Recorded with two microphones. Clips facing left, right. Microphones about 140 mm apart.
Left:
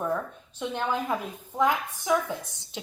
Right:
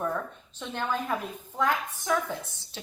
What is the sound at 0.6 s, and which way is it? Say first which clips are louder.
A woman's voice: left 2 dB; 15° left (ahead or behind).